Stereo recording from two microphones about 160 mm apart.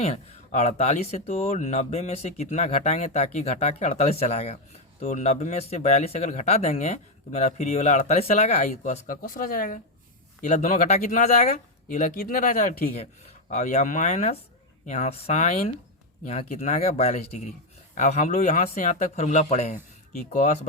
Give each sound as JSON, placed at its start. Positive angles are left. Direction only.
{"t": 0.0, "sound": "speech", "side_deg": 45}
{"t": 13.2, "sound": "speech", "side_deg": 45}